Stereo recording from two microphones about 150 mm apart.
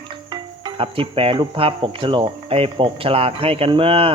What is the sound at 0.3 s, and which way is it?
Speech, 35° right (ahead or behind).